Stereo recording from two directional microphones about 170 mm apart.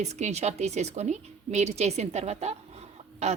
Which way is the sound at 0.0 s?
40° right (ahead or behind).